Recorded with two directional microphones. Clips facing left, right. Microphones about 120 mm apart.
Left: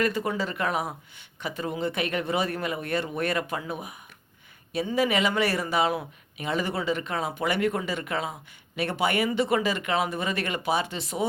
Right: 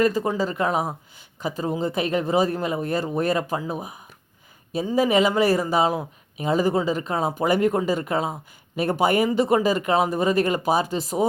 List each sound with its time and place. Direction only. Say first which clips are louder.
0.0 s speech: right 5 dB; 35° right (ahead or behind)